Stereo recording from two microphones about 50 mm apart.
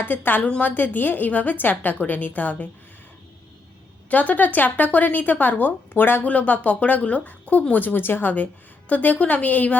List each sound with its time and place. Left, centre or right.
0.0 s speech: left
4.1 s speech: left
6.2 s speech: left